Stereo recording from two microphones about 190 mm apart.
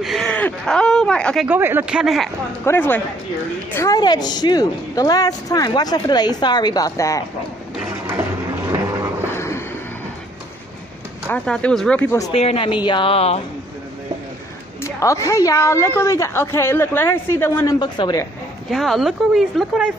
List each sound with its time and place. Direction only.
0.0 s a sound: centre (ahead or behind)
2.6 s a woman's voice: 10° left (ahead or behind)
9.3 s vehicle: 15° left (ahead or behind)
11.2 s a woman's voice: 5° left (ahead or behind)
12.3 s a woman's voice: 30° left (ahead or behind)
14.8 s a woman's voice: 15° left (ahead or behind)
17.7 s a woman's voice: 25° left (ahead or behind)
18.7 s a woman's voice: centre (ahead or behind)